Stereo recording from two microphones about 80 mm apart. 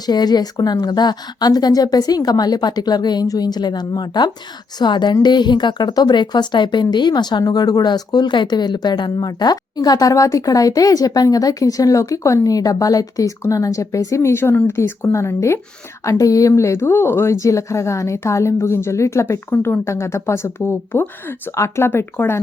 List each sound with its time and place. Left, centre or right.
0.0 s a woman's voice: left
16.0 s speech: left
21.5 s speech: left